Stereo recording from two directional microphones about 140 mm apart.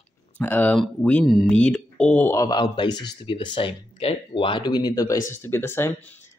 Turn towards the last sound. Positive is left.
turn(degrees=15)  # may be behind; listen again after turning